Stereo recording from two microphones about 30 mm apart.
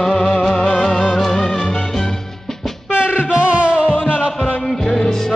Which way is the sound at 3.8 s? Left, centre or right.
Left.